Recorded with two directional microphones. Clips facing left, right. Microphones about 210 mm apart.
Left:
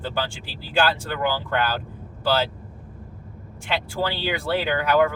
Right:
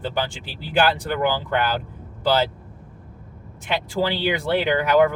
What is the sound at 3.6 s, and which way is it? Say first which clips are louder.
Speech: right 3 dB; 20° right (ahead or behind).